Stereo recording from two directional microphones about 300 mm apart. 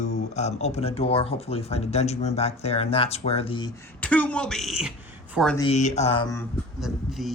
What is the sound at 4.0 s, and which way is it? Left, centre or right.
Speech, centre.